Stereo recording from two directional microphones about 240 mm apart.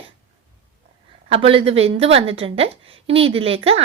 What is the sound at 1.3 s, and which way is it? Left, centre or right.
Speech, right.